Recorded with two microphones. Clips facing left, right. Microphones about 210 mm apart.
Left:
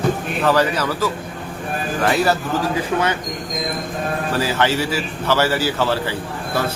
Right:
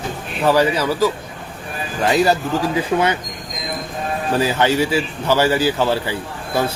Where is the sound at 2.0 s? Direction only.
15° right (ahead or behind).